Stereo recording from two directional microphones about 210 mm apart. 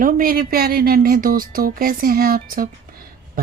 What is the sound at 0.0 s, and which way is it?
Speech, 45° right (ahead or behind).